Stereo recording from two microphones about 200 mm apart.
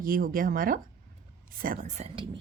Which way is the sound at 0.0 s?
45° right (ahead or behind).